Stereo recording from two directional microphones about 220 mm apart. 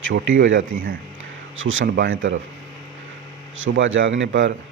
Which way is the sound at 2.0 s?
60° right (ahead or behind).